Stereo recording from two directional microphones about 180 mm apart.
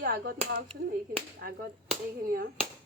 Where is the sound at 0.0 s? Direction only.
55° right (ahead or behind).